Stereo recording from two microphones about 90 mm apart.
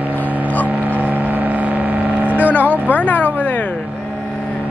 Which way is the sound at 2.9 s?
15° left (ahead or behind).